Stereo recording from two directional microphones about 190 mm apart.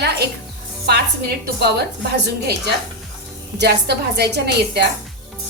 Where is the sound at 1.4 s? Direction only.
60° right (ahead or behind).